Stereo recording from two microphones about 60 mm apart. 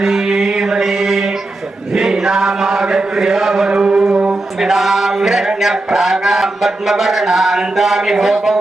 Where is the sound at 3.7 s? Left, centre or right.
Centre.